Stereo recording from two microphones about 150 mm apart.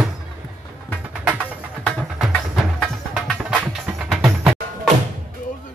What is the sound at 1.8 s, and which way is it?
Music, 5° left (ahead or behind).